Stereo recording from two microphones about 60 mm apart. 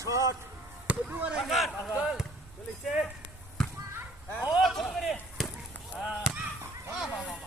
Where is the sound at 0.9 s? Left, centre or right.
Right.